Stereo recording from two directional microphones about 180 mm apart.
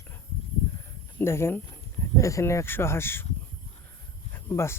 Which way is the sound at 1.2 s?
15° left (ahead or behind).